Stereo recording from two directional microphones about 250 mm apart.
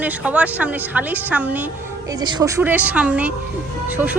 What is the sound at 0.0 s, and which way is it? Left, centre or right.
A woman's voice, centre.